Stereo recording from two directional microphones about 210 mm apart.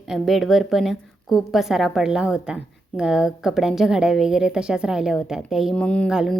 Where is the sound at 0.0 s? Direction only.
Centre (ahead or behind).